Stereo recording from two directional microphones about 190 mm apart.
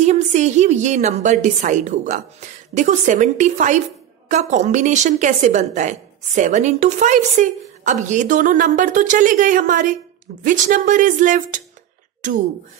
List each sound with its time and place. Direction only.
0.0 s a woman's voice: 40° right (ahead or behind)